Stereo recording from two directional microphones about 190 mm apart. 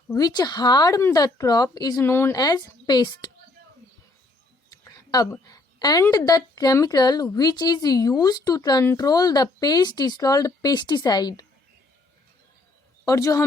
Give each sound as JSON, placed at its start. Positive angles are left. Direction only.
{"t": 0.1, "sound": "a woman's voice", "side_deg": 20}
{"t": 4.7, "sound": "a woman's voice", "side_deg": 20}
{"t": 13.1, "sound": "speech", "side_deg": 15}